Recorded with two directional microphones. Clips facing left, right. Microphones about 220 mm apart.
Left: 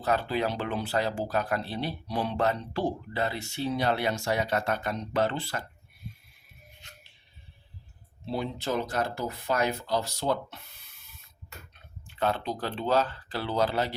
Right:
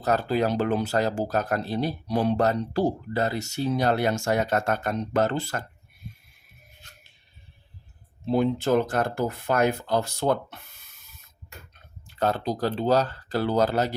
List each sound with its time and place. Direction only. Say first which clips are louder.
0.0 s speech: right 4 dB; 40° right (ahead or behind)
8.3 s speech: right 9 dB; 50° right (ahead or behind)
12.0 s speech: right 4 dB; 40° right (ahead or behind)